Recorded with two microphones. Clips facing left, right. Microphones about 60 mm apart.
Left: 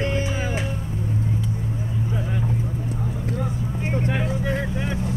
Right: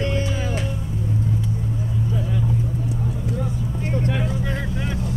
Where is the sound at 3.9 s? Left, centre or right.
Left.